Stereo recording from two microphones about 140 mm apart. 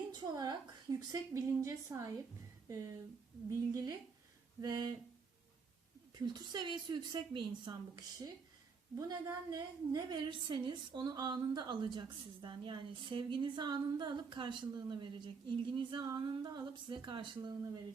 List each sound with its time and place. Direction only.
0.1 s a woman's voice: 30° right (ahead or behind)
6.2 s a woman's voice: 30° right (ahead or behind)